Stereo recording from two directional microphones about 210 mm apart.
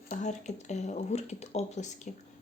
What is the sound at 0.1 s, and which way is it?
Speech, 35° left (ahead or behind).